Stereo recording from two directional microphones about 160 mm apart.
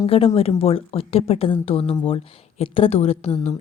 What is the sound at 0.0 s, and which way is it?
A woman's voice, 35° left (ahead or behind).